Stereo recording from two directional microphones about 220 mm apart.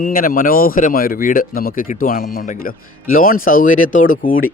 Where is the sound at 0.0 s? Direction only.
40° left (ahead or behind).